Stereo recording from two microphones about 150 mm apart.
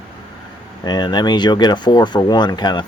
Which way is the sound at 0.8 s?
30° left (ahead or behind).